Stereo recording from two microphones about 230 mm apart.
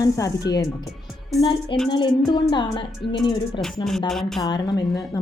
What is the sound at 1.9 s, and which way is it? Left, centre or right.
Speech, centre.